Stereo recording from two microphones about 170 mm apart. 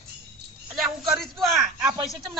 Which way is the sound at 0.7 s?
Centre (ahead or behind).